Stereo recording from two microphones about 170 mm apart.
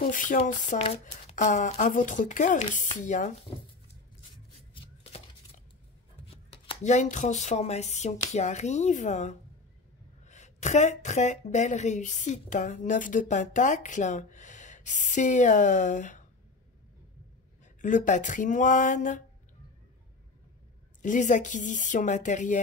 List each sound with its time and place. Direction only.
0.0 s speech: 50° left (ahead or behind)
6.2 s chopping: 35° left (ahead or behind)
6.8 s speech: 45° left (ahead or behind)
17.8 s speech: 50° left (ahead or behind)
21.0 s speech: 45° left (ahead or behind)